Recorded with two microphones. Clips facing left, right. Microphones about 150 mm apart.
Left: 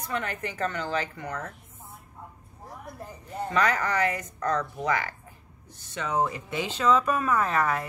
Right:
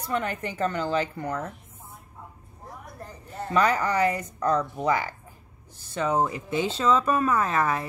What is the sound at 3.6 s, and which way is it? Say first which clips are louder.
Speech: right 3 dB; 35° right (ahead or behind).